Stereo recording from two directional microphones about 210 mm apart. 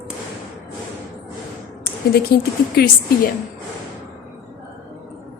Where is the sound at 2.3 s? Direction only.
45° left (ahead or behind).